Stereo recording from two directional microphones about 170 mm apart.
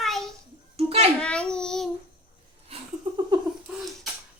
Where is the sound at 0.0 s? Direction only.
Centre (ahead or behind).